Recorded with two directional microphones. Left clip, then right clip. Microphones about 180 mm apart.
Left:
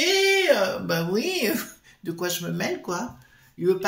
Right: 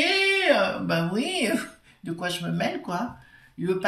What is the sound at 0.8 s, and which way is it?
Speech, 50° left (ahead or behind).